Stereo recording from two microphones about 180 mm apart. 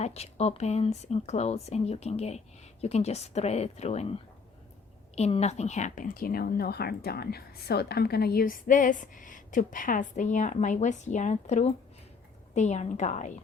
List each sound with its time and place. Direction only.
0.0 s a woman's voice: 35° left (ahead or behind)